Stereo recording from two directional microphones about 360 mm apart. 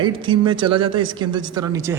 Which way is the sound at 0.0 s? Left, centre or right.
Centre.